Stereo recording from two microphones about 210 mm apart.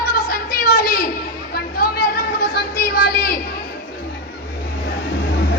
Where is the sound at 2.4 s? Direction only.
45° left (ahead or behind).